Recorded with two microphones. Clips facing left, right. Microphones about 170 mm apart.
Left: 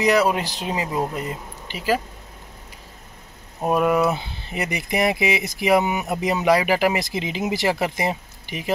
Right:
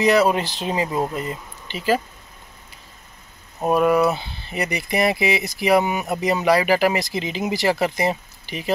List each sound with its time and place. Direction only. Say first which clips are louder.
0.0 s speech: right 2 dB; 10° left (ahead or behind)
3.6 s speech: right 2 dB; 15° left (ahead or behind)